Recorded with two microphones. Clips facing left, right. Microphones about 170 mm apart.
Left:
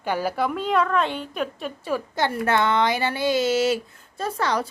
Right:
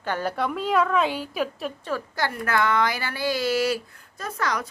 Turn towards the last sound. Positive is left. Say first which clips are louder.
# left 4 dB
turn(degrees=30)  # may be behind; listen again after turning